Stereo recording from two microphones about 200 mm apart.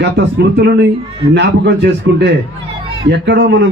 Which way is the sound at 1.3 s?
60° right (ahead or behind).